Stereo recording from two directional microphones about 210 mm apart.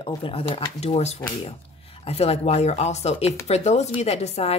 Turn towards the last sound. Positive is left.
turn(degrees=30)  # may be behind; listen again after turning